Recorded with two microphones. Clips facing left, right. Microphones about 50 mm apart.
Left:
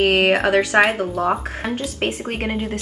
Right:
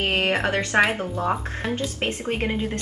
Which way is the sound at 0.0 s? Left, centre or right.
Left.